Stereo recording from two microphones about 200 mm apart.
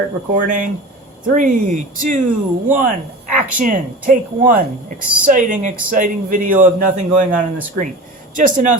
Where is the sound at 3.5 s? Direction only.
40° right (ahead or behind).